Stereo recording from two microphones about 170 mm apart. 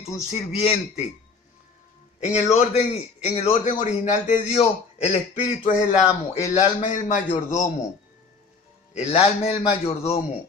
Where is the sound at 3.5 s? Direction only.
50° left (ahead or behind).